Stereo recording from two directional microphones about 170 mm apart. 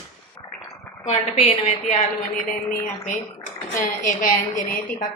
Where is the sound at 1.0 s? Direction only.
35° left (ahead or behind).